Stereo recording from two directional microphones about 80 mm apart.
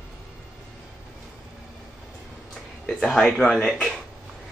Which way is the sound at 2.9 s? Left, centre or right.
Centre.